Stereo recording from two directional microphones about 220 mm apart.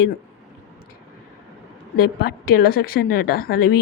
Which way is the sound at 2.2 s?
45° left (ahead or behind).